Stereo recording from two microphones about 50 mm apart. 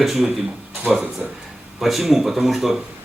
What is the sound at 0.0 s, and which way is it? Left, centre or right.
A man's voice, centre.